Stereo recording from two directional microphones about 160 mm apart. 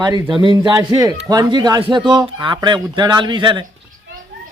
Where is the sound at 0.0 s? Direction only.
25° right (ahead or behind).